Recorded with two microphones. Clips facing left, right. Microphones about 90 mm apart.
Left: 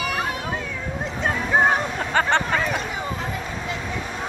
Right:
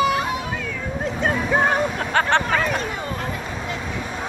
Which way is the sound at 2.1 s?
Centre (ahead or behind).